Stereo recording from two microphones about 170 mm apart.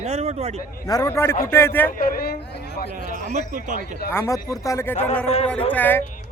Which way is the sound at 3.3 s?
45° right (ahead or behind).